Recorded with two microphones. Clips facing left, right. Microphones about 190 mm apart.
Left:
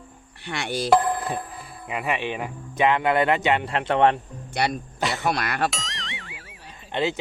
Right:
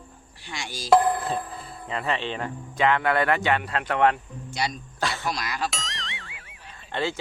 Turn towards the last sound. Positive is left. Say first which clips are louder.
# left 3 dB
turn(degrees=20)  # may be behind; listen again after turning